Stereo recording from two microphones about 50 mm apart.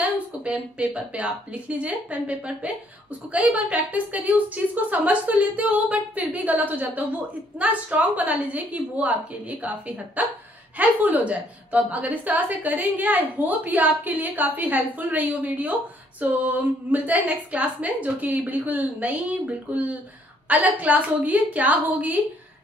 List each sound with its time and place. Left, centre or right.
0.4 s a woman's voice: right